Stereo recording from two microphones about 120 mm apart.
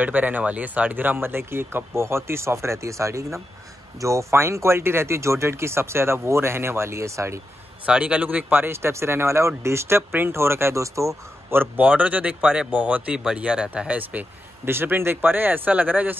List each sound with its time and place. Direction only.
0.0 s speech: 15° right (ahead or behind)
7.8 s speech: 10° right (ahead or behind)